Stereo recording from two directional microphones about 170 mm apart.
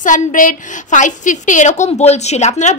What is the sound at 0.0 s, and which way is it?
A woman's voice, 50° left (ahead or behind).